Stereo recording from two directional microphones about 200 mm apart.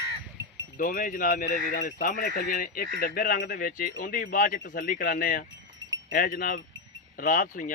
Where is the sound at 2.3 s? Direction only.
55° left (ahead or behind).